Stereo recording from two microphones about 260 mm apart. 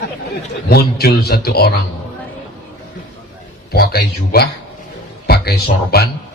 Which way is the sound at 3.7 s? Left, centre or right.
Left.